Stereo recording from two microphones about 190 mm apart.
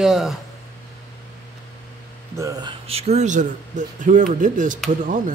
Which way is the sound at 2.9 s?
35° right (ahead or behind).